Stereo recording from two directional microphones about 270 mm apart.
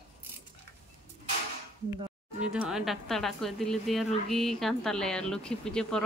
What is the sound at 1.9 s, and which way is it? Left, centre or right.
Speech, centre.